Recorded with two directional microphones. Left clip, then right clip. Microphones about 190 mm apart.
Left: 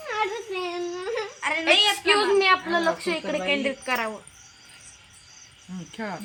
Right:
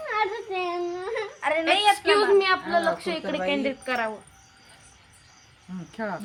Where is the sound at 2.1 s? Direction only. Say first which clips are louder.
Even; 50° left (ahead or behind).